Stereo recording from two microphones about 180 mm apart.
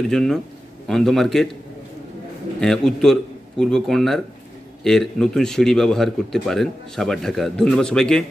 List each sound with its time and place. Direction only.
0.1 s a man's voice: centre (ahead or behind)
2.6 s a man's voice: 5° left (ahead or behind)